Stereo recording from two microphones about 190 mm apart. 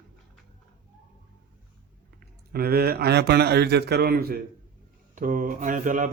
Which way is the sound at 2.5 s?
55° right (ahead or behind).